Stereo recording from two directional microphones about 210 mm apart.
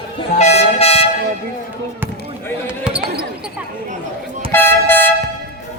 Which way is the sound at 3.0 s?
50° right (ahead or behind).